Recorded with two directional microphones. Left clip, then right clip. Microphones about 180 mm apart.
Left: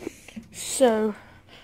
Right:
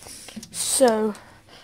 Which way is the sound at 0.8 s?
20° right (ahead or behind).